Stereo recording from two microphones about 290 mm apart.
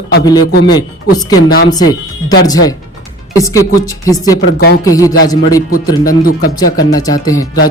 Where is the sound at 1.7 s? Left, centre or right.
Centre.